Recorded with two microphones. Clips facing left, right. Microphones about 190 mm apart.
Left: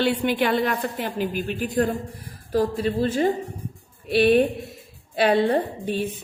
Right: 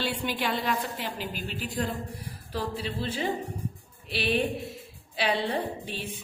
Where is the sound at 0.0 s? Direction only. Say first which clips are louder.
Left 9 dB; 55° left (ahead or behind).